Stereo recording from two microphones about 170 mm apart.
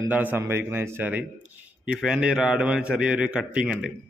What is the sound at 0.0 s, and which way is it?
A man's voice, 10° right (ahead or behind).